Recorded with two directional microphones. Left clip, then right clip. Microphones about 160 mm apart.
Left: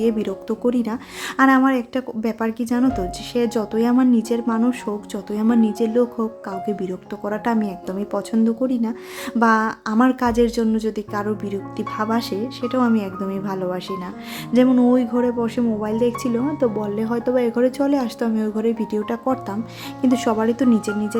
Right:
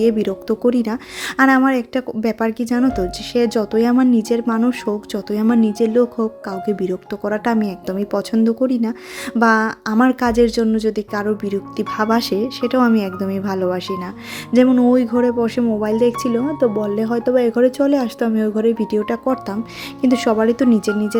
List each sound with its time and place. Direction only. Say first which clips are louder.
0.0 s speech: right 4 dB; 25° right (ahead or behind)